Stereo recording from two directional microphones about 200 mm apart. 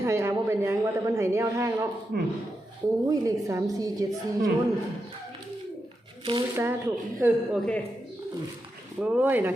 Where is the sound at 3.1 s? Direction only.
15° right (ahead or behind).